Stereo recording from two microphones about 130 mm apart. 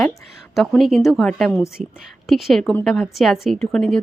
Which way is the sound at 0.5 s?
Centre (ahead or behind).